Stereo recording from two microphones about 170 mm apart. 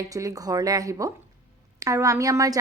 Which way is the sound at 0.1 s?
20° right (ahead or behind).